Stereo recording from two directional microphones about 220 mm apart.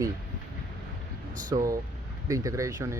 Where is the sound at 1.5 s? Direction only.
15° right (ahead or behind).